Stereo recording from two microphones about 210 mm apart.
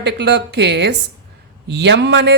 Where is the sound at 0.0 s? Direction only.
55° right (ahead or behind).